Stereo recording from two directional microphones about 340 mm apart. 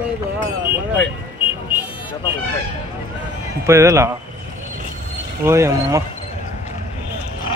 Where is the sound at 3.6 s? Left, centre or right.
Centre.